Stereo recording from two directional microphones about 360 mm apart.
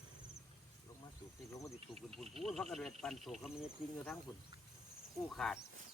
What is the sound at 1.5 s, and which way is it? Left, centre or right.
Insect, centre.